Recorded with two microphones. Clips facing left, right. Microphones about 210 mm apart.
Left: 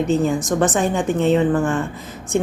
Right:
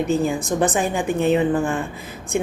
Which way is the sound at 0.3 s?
35° right (ahead or behind).